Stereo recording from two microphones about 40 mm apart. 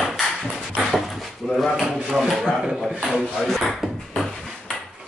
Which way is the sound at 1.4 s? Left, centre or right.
Centre.